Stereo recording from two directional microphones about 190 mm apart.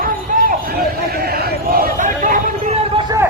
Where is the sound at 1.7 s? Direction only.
45° right (ahead or behind).